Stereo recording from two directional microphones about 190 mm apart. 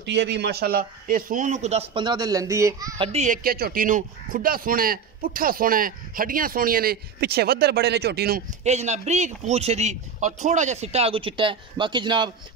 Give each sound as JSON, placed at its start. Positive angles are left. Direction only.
{"t": 0.0, "sound": "a man's voice", "side_deg": -65}
{"t": 3.0, "sound": "a man's voice", "side_deg": -35}
{"t": 3.4, "sound": "speech", "side_deg": -50}
{"t": 8.6, "sound": "a man's voice", "side_deg": -35}